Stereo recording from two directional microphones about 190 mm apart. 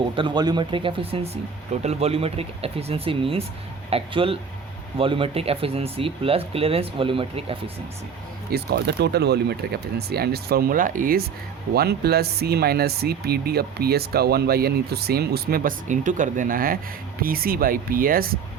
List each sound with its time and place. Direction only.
0.2 s speech: 25° right (ahead or behind)
8.5 s speech: 60° right (ahead or behind)